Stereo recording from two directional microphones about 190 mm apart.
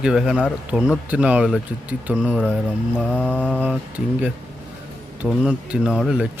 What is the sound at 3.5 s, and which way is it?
Speech, 10° right (ahead or behind).